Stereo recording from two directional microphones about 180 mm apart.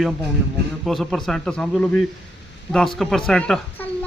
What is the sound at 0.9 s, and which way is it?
Speech, centre (ahead or behind).